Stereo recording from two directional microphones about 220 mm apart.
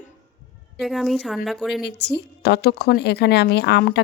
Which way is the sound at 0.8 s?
Centre (ahead or behind).